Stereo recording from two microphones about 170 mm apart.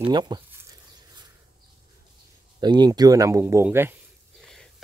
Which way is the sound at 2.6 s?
25° right (ahead or behind).